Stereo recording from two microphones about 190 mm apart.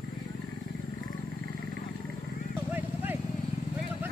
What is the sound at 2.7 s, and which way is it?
Vehicle, 10° right (ahead or behind).